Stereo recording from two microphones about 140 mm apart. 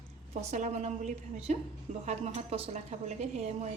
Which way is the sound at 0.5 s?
55° right (ahead or behind).